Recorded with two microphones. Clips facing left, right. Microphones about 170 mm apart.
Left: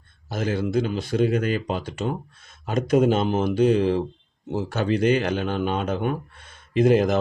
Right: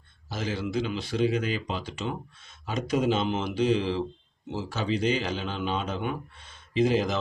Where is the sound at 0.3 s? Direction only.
50° left (ahead or behind).